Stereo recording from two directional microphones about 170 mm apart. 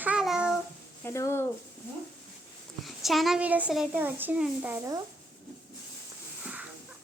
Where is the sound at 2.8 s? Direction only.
Centre (ahead or behind).